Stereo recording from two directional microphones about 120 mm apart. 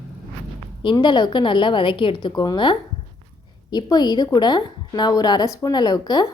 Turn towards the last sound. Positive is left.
turn(degrees=35)  # may be behind; listen again after turning